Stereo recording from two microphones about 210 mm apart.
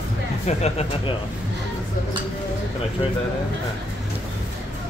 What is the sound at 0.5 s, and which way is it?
Speech, 30° left (ahead or behind).